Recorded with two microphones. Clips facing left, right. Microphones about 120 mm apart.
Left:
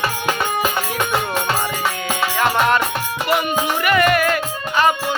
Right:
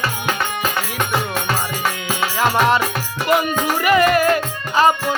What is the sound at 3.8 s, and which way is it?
Music, 25° right (ahead or behind).